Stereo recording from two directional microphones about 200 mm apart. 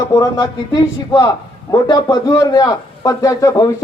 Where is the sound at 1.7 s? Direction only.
20° left (ahead or behind).